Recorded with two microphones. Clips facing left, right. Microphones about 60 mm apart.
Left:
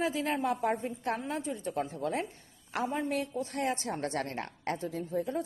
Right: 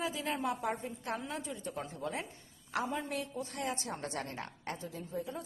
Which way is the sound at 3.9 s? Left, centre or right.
Left.